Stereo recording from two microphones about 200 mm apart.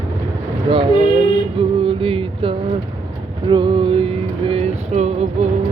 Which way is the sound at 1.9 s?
25° right (ahead or behind).